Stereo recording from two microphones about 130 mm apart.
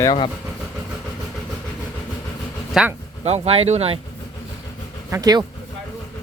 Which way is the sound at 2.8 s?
5° right (ahead or behind).